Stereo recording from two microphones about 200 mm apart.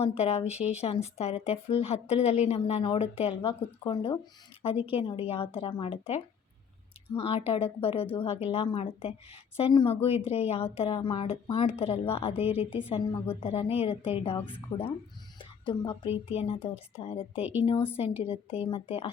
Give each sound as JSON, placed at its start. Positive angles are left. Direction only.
{"t": 0.0, "sound": "a woman's voice", "side_deg": 30}